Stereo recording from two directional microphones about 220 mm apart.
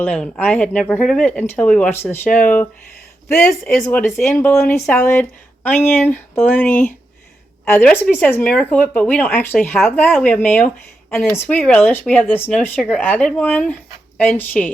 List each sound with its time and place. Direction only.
0.0 s speech: 5° left (ahead or behind)